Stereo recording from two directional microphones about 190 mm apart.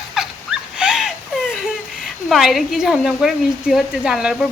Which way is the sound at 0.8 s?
5° right (ahead or behind).